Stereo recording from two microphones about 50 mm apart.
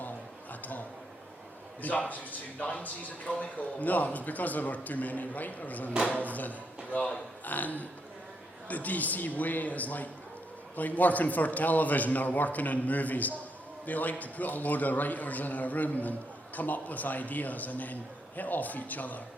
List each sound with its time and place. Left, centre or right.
1.8 s a man's voice: left